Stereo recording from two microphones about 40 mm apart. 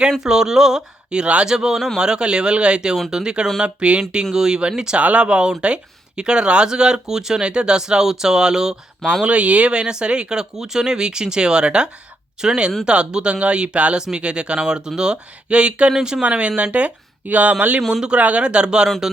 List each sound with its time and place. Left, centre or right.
0.2 s speech: centre
1.1 s speech: right
1.5 s speech: centre
4.3 s speech: centre
4.9 s speech: right; by 8.7 s centre
9.2 s speech: right
15.9 s speech: centre
16.2 s speech: right
17.8 s speech: centre
18.1 s speech: right